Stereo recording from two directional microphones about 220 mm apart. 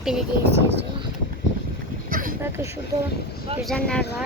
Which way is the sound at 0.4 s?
50° right (ahead or behind).